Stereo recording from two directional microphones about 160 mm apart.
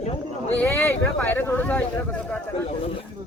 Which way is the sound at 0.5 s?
10° left (ahead or behind).